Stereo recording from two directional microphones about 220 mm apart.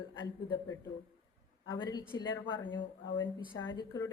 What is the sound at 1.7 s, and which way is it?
A woman's voice, 20° left (ahead or behind).